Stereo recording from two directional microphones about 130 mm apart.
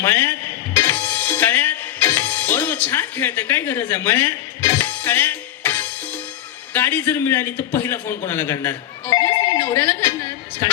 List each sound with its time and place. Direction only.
0.0 s music: 20° left (ahead or behind)
6.7 s a man's voice: 15° left (ahead or behind)